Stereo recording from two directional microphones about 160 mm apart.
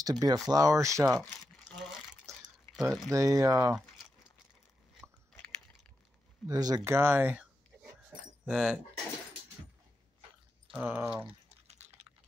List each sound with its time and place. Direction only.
0.0 s speech: 25° right (ahead or behind)
1.3 s crumpling: centre (ahead or behind)
2.3 s drip: 20° right (ahead or behind)
2.7 s speech: centre (ahead or behind)
3.1 s speech: 20° right (ahead or behind)
6.4 s speech: 20° right (ahead or behind); by 8.7 s 5° right (ahead or behind)
10.7 s speech: 10° right (ahead or behind)